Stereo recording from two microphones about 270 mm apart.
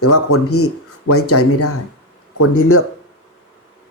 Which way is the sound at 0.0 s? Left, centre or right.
Left.